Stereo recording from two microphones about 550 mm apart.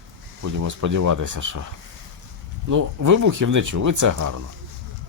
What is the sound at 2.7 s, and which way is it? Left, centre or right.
Speech, right.